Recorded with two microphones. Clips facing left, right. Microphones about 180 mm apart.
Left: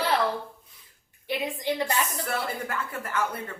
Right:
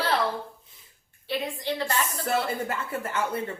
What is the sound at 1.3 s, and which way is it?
Speech, 15° left (ahead or behind).